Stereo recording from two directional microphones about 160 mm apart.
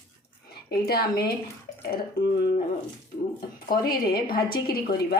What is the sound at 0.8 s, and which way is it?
A woman's voice, 75° left (ahead or behind).